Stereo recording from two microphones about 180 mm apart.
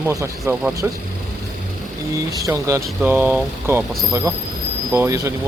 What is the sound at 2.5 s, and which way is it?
Speech, 15° right (ahead or behind).